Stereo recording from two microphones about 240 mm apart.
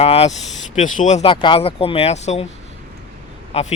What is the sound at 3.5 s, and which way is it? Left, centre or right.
Speech, left.